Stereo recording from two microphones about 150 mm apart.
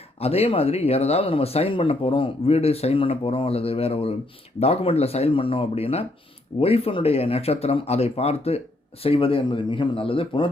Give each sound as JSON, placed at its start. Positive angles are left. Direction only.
{"t": 0.2, "sound": "speech", "side_deg": 45}